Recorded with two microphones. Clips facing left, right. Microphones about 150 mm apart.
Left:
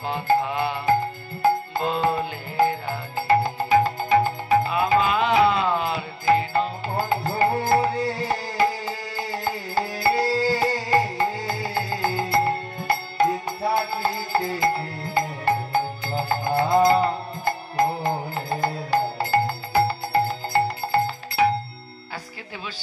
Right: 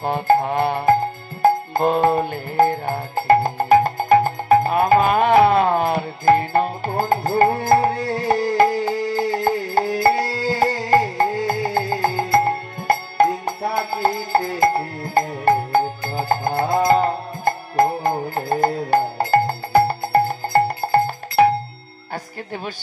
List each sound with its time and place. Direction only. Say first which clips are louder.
0.0 s music: right 5 dB; 50° right (ahead or behind)